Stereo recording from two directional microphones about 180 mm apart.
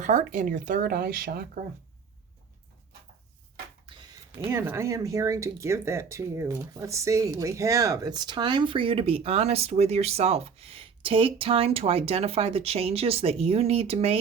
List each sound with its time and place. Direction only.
0.0 s speech: 40° right (ahead or behind)
3.8 s a sound: 30° right (ahead or behind)
4.4 s speech: 15° right (ahead or behind); by 14.2 s 35° right (ahead or behind)